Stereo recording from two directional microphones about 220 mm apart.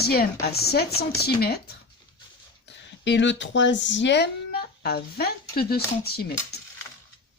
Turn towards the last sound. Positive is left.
turn(degrees=45)  # may be behind; listen again after turning